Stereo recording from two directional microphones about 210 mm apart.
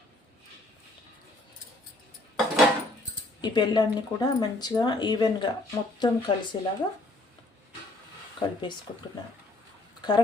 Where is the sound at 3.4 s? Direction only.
20° left (ahead or behind).